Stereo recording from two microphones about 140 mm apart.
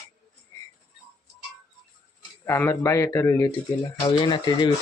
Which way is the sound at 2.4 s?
15° left (ahead or behind).